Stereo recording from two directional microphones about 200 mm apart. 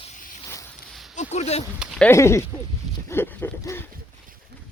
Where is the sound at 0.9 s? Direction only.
Centre (ahead or behind).